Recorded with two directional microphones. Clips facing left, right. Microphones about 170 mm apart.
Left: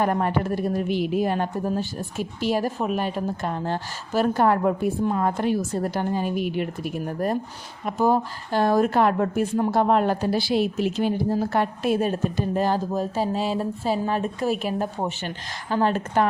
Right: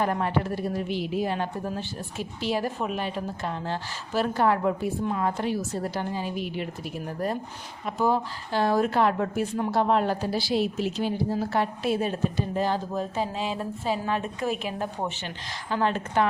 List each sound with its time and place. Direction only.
0.0 s a woman's voice: 50° left (ahead or behind)